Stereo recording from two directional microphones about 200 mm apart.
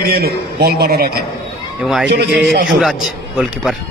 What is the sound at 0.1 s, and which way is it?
Speech, 50° right (ahead or behind).